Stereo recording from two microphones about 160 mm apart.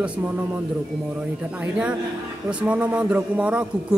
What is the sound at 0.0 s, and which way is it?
A man's voice, 10° right (ahead or behind).